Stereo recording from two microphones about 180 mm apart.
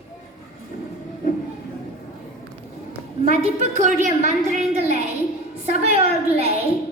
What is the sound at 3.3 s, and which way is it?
A woman's voice, 40° right (ahead or behind).